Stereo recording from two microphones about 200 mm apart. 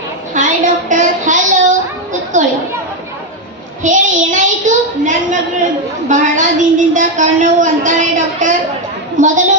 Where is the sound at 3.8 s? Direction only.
40° right (ahead or behind).